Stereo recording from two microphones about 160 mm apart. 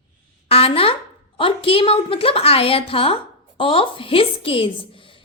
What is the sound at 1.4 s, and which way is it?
A woman's voice, 35° left (ahead or behind).